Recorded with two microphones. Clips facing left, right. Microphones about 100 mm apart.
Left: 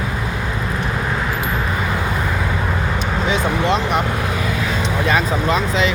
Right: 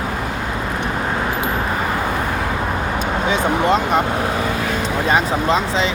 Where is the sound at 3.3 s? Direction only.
50° right (ahead or behind).